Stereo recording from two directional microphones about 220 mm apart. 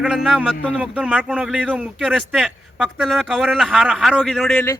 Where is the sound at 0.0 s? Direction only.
5° right (ahead or behind).